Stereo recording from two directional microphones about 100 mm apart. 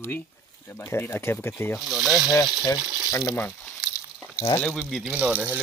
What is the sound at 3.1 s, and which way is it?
Speech, 30° left (ahead or behind).